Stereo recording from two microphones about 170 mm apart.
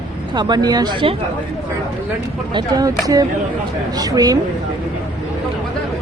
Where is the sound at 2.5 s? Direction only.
20° right (ahead or behind).